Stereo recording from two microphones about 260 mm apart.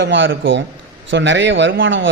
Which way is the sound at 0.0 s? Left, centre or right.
Right.